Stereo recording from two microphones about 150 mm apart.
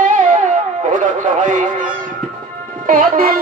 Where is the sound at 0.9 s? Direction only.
60° right (ahead or behind).